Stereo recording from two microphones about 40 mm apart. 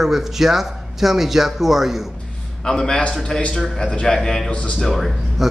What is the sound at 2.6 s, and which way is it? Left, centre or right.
A man's voice, centre.